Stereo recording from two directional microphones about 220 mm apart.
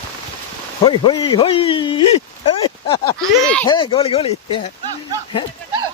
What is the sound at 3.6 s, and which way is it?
Speech, 20° left (ahead or behind).